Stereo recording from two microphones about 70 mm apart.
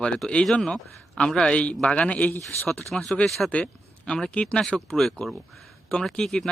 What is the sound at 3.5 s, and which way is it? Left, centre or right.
Speech, centre.